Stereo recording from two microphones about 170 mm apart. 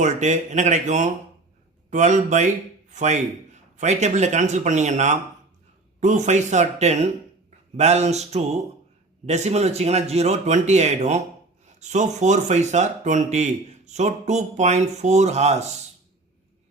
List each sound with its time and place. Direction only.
0.0 s speech: 45° right (ahead or behind)